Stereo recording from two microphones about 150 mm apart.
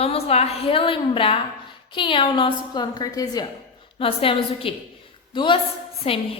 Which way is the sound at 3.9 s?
40° left (ahead or behind).